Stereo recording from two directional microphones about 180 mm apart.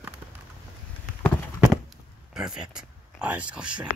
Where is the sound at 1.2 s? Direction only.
Centre (ahead or behind).